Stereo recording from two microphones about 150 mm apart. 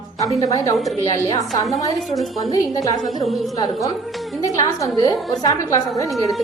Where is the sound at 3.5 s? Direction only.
25° left (ahead or behind).